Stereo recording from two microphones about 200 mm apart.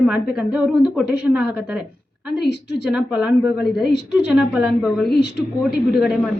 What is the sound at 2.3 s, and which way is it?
Speech, 55° left (ahead or behind).